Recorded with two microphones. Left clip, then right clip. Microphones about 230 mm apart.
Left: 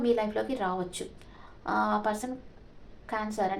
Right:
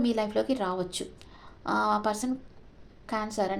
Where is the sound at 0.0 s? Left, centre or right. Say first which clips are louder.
Even; right.